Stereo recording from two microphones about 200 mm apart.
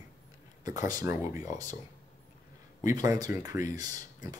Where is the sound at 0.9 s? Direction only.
15° right (ahead or behind).